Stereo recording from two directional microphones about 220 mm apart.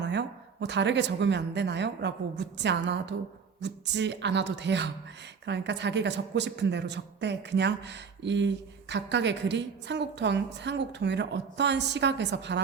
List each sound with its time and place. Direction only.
0.0 s speech: 50° right (ahead or behind)